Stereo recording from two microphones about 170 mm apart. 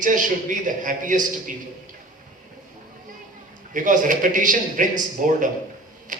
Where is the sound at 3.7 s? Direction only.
50° right (ahead or behind).